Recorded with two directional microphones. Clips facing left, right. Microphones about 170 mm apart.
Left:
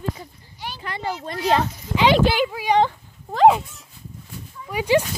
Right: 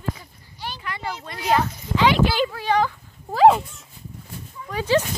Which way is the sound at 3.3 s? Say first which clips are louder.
Even; centre (ahead or behind).